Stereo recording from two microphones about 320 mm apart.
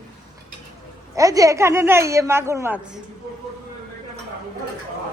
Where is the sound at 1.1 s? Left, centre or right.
Centre.